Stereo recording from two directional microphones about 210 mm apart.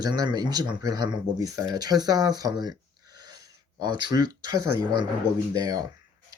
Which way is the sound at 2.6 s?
20° right (ahead or behind).